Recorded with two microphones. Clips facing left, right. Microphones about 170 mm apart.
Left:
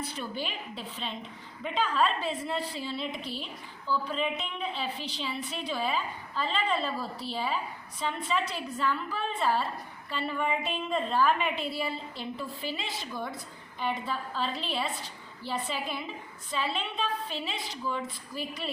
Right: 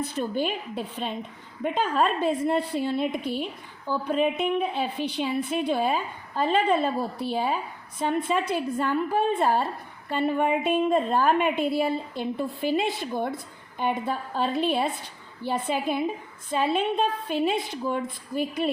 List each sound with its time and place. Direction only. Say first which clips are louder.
0.0 s a woman's voice: right 8 dB; 50° right (ahead or behind)